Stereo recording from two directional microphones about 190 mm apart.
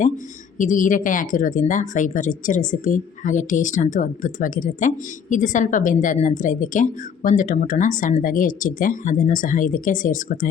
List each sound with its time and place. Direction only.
0.6 s speech: 45° left (ahead or behind)